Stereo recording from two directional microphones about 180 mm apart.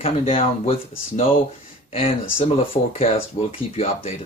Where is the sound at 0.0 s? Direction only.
30° left (ahead or behind).